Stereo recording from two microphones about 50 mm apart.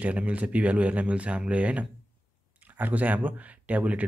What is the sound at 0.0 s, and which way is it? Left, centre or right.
Speech, right.